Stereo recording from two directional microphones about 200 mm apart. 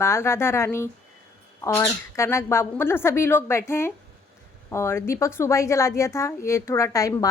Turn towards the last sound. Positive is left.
turn(degrees=15)  # may be behind; listen again after turning